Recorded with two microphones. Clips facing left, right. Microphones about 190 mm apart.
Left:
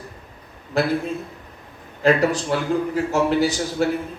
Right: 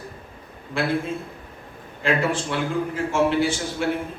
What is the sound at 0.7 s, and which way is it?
Speech, 40° left (ahead or behind).